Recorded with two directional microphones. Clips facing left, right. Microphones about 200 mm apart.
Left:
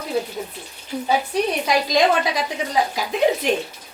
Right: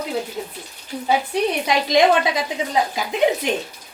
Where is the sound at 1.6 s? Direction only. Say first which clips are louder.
Right 3 dB; 20° right (ahead or behind).